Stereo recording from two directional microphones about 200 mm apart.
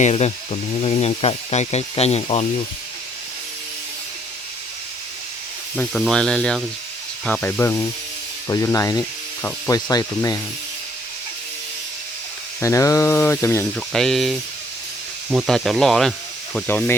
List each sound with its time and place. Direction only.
0.0 s speech: 30° left (ahead or behind)
5.7 s speech: centre (ahead or behind); by 10.4 s 20° left (ahead or behind)
12.6 s speech: 15° left (ahead or behind)
13.7 s speech: centre (ahead or behind)